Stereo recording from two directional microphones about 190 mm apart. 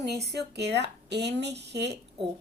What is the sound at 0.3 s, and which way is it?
Speech, 60° right (ahead or behind).